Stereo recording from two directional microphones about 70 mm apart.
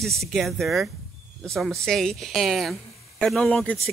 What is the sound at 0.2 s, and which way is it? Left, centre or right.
Speech, centre.